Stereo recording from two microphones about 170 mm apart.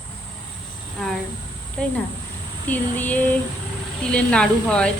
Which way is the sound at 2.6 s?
10° left (ahead or behind).